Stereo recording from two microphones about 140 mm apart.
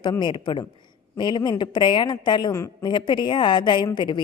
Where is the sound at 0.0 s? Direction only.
30° left (ahead or behind).